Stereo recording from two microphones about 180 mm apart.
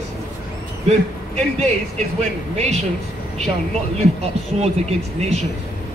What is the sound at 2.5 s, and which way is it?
Speech, 35° right (ahead or behind).